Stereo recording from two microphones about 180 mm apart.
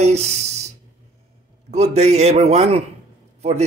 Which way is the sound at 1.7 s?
35° right (ahead or behind).